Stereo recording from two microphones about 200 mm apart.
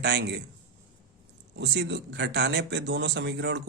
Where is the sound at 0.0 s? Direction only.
55° right (ahead or behind).